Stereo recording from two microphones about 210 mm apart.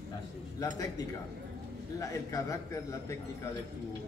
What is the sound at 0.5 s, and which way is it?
Speech, 15° left (ahead or behind).